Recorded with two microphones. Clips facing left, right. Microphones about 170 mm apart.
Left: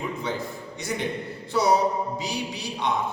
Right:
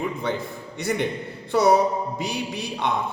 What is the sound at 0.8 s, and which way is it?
A man's voice, 60° right (ahead or behind).